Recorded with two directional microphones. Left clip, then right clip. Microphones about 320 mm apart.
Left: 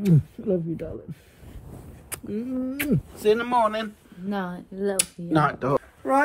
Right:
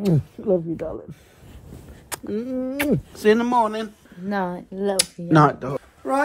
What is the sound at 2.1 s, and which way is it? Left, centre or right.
Speech, right.